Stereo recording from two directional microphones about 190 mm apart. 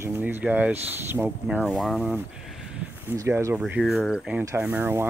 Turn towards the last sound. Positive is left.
turn(degrees=-10)  # may be behind; listen again after turning